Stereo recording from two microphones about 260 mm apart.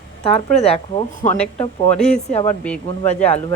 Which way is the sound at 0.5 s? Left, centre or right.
Left.